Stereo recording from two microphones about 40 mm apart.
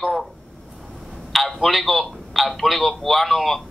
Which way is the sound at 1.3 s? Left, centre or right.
Centre.